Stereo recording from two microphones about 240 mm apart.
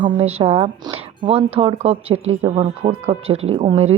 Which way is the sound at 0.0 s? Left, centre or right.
Right.